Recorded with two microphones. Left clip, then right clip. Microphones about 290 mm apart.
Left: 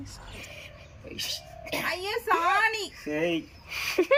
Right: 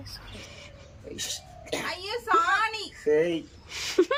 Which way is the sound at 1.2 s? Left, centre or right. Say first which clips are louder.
Left 2 dB; centre.